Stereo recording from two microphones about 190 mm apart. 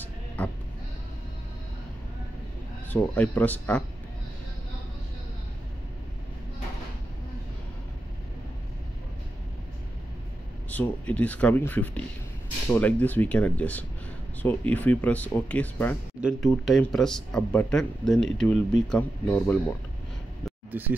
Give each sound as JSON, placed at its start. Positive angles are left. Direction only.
{"t": 0.4, "sound": "speech", "side_deg": 5}
{"t": 2.9, "sound": "speech", "side_deg": 10}
{"t": 10.7, "sound": "speech", "side_deg": 10}
{"t": 16.2, "sound": "speech", "side_deg": -5}
{"t": 20.4, "sound": "a sound", "side_deg": -10}